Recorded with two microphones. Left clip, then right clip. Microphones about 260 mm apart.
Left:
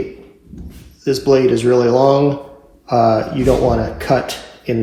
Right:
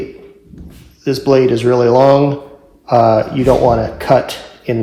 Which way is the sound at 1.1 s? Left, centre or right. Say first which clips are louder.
Right 1 dB; right.